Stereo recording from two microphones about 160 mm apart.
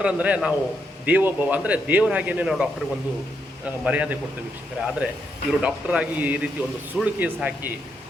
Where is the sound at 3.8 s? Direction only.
10° right (ahead or behind).